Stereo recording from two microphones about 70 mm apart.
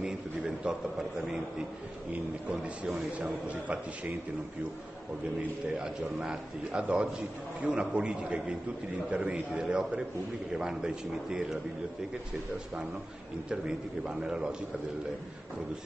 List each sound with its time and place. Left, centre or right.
0.7 s a man's voice: centre
2.5 s a man's voice: centre
5.8 s a man's voice: centre
13.5 s a man's voice: centre